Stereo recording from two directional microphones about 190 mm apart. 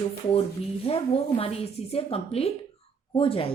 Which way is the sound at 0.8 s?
30° left (ahead or behind).